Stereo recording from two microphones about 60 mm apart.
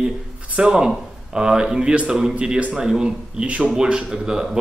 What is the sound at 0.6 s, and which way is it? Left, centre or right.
Speech, centre.